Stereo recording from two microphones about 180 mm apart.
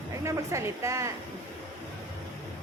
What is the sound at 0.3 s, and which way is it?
Speech, 15° right (ahead or behind).